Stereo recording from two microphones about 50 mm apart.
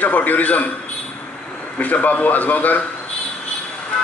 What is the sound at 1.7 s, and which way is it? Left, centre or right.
A man's voice, left.